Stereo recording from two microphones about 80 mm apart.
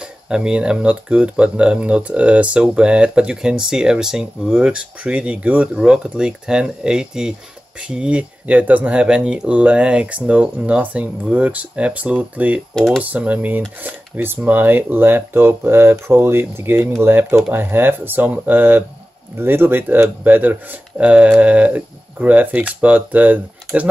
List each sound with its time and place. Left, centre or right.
0.0 s speech: centre
12.7 s speech: centre
13.0 s speech: centre